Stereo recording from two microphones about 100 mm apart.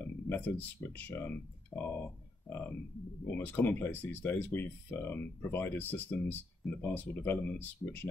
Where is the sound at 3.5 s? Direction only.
20° left (ahead or behind).